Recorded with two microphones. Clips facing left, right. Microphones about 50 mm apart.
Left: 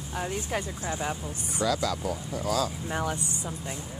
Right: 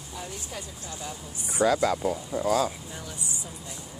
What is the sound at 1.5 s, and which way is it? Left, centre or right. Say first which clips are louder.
Speech: right 5 dB; right.